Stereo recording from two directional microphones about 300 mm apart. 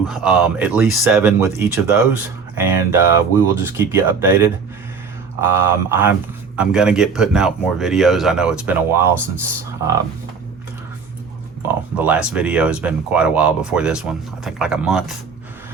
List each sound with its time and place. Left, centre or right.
0.1 s speech: centre
11.9 s speech: centre